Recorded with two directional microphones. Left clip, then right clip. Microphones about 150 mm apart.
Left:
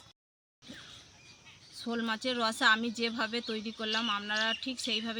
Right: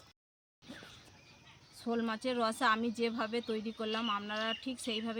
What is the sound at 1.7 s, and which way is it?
Speech, 10° right (ahead or behind).